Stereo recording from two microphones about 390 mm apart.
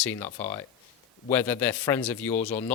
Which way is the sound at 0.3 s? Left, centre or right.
Centre.